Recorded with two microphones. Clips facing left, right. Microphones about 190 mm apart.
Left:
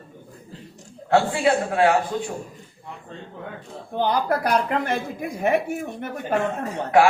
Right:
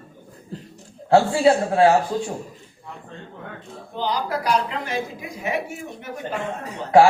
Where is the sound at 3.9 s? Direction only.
55° left (ahead or behind).